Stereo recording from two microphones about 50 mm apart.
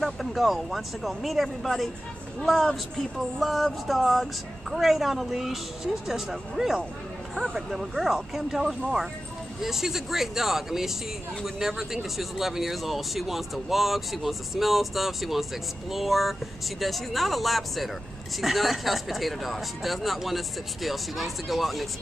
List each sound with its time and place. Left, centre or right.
0.0 s speech: centre